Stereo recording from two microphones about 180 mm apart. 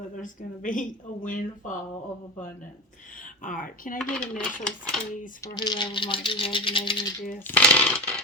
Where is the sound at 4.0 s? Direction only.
5° left (ahead or behind).